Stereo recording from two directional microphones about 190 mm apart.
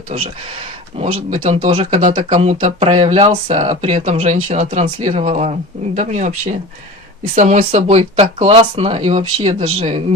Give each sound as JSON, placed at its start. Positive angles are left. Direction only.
{"t": 0.9, "sound": "speech", "side_deg": -35}
{"t": 7.3, "sound": "speech", "side_deg": -40}